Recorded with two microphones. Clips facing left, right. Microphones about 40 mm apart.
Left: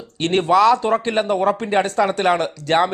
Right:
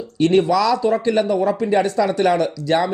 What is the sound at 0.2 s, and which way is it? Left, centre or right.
Speech, left.